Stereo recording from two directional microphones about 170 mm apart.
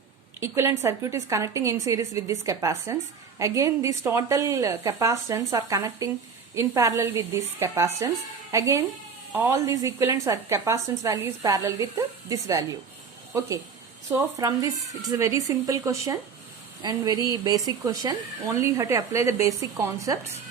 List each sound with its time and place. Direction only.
0.3 s a woman's voice: 15° right (ahead or behind)
14.1 s a woman's voice: 15° right (ahead or behind)